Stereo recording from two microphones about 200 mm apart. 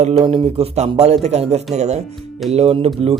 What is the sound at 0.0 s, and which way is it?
Speech, 30° right (ahead or behind).